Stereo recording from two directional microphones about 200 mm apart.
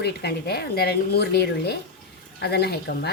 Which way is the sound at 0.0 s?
55° left (ahead or behind).